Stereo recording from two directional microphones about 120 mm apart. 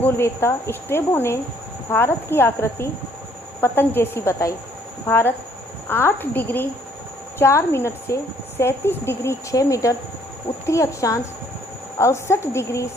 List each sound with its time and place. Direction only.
0.0 s a woman's voice: 20° left (ahead or behind)